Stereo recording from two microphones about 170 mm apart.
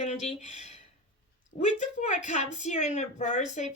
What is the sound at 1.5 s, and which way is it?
Speech, 45° left (ahead or behind).